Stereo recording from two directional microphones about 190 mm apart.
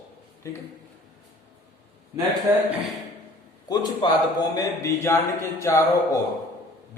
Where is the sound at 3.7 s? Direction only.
20° left (ahead or behind).